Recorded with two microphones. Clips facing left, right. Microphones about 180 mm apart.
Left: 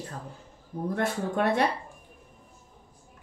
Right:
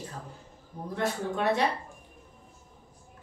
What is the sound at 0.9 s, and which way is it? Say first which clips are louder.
Speech: left 1 dB; 55° left (ahead or behind).